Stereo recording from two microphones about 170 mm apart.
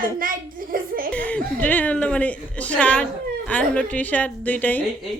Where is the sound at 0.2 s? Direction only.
55° right (ahead or behind).